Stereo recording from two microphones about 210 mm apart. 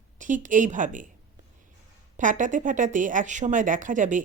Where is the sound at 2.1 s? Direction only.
40° right (ahead or behind).